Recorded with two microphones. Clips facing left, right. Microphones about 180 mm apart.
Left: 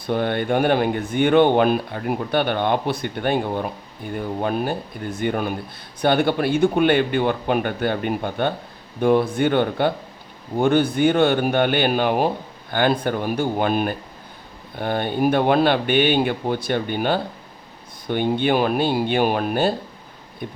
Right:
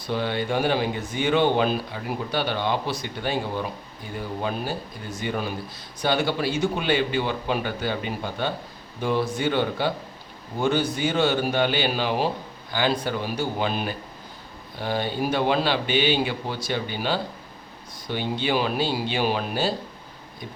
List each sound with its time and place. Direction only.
0.1 s speech: 55° left (ahead or behind)